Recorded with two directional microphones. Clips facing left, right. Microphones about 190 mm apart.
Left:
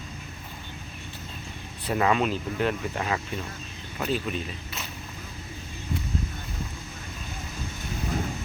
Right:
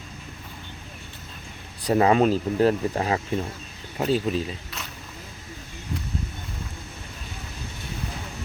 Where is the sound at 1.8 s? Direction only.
35° right (ahead or behind).